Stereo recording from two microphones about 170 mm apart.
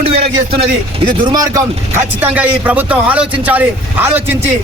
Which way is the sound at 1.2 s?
20° right (ahead or behind).